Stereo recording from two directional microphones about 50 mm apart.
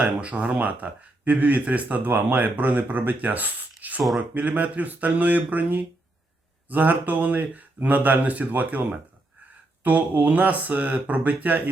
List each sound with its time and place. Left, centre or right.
0.0 s speech: right